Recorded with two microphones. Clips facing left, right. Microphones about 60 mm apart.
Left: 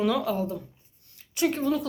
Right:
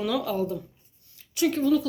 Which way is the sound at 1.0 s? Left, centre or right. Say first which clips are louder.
Right 1 dB; left.